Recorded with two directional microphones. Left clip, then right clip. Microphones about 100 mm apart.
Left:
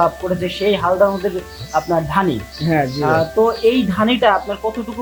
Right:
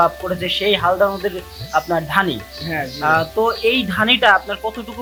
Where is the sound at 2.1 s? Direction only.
Centre (ahead or behind).